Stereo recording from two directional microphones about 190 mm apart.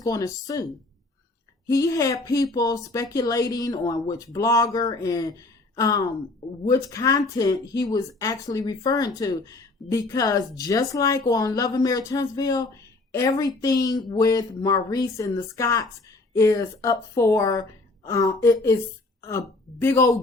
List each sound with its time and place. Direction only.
0.0 s a woman's voice: 20° left (ahead or behind)